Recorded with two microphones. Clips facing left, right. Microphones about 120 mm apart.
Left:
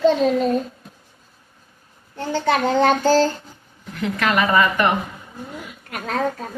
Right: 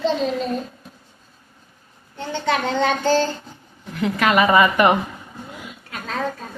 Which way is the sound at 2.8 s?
40° left (ahead or behind).